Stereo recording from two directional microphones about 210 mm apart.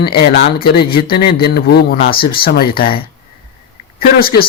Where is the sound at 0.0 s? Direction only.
45° left (ahead or behind).